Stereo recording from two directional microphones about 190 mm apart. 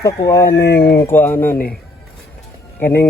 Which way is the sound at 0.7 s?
55° left (ahead or behind).